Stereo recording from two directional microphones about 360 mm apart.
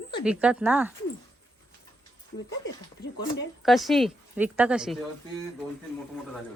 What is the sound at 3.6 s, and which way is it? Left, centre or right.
A woman's voice, centre.